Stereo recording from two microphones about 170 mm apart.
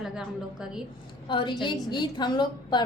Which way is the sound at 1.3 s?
30° left (ahead or behind).